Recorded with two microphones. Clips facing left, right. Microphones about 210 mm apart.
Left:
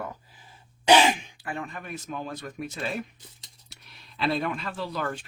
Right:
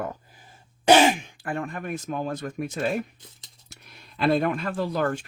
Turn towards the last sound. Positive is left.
turn(degrees=-50)  # may be behind; listen again after turning